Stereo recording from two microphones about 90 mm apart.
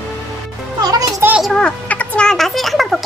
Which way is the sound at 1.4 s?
10° left (ahead or behind).